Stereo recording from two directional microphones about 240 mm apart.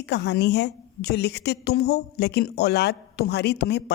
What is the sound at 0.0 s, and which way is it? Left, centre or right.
A woman's voice, left.